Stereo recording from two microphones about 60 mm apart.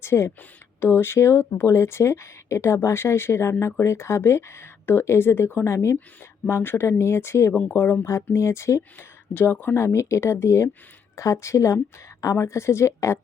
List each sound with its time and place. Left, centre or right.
0.0 s speech: left
7.7 s speech: left
8.1 s speech: left
9.0 s a woman's voice: left